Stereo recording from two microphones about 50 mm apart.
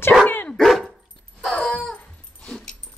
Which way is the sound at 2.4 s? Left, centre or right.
Centre.